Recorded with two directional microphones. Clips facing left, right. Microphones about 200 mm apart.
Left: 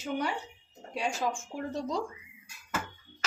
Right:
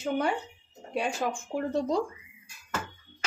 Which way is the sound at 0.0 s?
50° right (ahead or behind).